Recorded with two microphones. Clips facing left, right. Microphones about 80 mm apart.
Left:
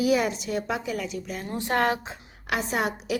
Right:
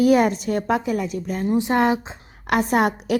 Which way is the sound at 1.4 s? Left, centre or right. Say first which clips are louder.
Right 6 dB; centre.